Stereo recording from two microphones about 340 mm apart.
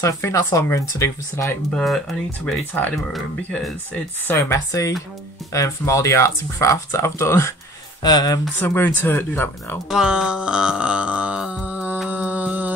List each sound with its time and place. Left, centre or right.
0.0 s speech: centre